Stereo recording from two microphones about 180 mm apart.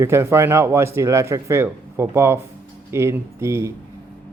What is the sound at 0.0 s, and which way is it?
A man's voice, 15° right (ahead or behind).